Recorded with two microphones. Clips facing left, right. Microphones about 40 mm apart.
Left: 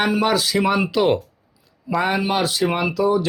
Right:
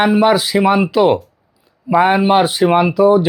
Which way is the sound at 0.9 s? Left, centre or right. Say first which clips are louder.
Right 5 dB; centre.